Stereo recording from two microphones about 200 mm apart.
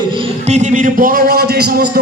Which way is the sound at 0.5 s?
40° right (ahead or behind).